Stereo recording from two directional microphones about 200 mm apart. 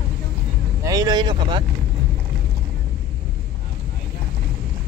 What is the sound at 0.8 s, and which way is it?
Speech, 15° right (ahead or behind).